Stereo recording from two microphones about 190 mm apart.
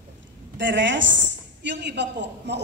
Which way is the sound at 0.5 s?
75° right (ahead or behind).